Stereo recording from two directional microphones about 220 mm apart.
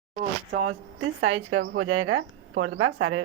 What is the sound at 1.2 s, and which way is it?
A woman's voice, 80° right.